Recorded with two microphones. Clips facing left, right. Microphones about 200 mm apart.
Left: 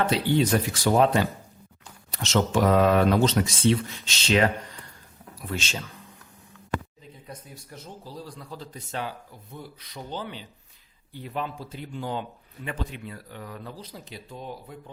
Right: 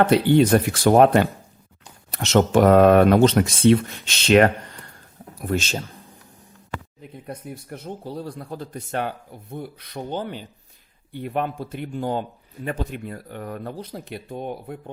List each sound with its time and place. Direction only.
0.0 s speech: 55° right (ahead or behind)
5.4 s speech: 45° right (ahead or behind)
7.0 s speech: 60° right (ahead or behind)